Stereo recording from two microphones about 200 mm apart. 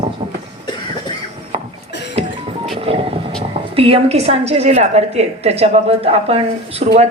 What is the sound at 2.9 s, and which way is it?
Vehicle, 30° right (ahead or behind).